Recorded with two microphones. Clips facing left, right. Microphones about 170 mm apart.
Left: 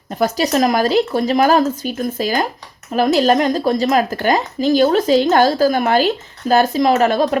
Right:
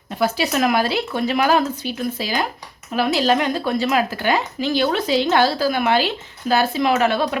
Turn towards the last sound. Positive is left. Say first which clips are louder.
# left 4 dB
turn(degrees=40)  # may be behind; listen again after turning